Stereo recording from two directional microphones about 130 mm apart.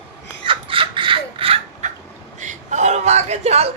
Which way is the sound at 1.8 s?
65° right (ahead or behind).